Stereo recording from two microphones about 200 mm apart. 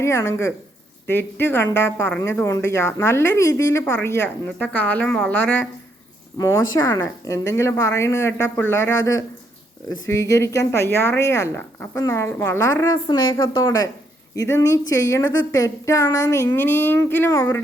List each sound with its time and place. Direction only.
0.0 s a woman's voice: 15° left (ahead or behind)